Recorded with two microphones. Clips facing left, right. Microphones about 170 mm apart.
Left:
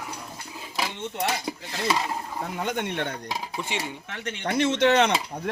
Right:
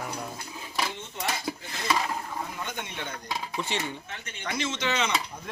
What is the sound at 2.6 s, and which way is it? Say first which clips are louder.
Speech: left 8 dB; 65° left (ahead or behind).